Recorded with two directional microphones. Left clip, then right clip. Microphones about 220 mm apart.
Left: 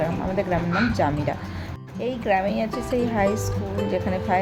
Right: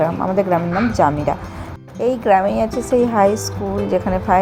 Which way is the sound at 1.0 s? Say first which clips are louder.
Right 8 dB; 10° right (ahead or behind).